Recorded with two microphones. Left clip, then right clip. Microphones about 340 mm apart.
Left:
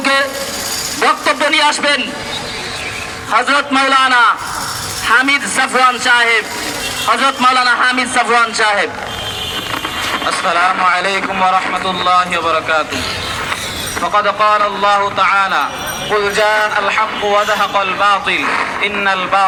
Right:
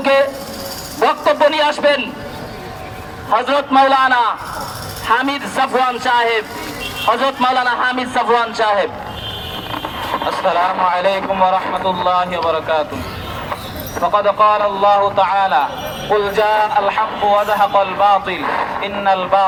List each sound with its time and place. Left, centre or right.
0.0 s a sound: right
0.9 s a man's voice: right
3.2 s a man's voice: right
10.1 s a man's voice: right
14.0 s a man's voice: right